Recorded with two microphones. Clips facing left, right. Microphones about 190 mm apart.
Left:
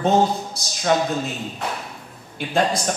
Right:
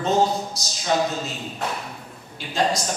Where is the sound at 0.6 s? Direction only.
55° left (ahead or behind).